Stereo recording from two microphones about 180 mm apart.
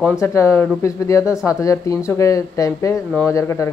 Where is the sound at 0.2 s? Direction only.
15° left (ahead or behind).